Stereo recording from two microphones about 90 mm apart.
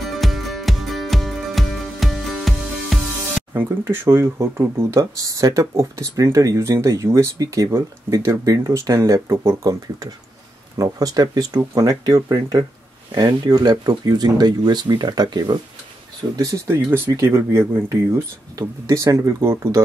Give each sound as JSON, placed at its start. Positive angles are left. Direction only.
{"t": 0.0, "sound": "music", "side_deg": 0}
{"t": 3.5, "sound": "speech", "side_deg": -25}
{"t": 16.3, "sound": "speech", "side_deg": -35}